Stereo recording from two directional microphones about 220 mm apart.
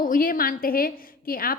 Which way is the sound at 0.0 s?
40° left (ahead or behind).